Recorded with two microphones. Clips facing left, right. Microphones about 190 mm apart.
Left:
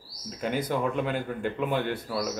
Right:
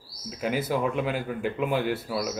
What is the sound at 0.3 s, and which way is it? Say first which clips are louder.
Speech: right 1 dB; 5° right (ahead or behind).